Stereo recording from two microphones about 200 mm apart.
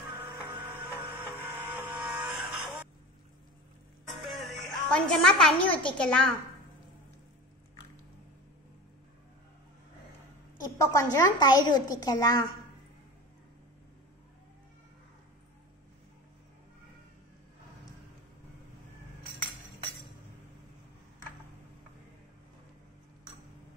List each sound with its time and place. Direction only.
0.7 s a sound: 10° right (ahead or behind)
4.3 s a woman's voice: centre (ahead or behind)
10.8 s a woman's voice: 15° left (ahead or behind)